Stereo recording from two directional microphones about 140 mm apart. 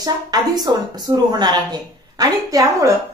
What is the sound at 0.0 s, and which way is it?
A woman's voice, 30° right (ahead or behind).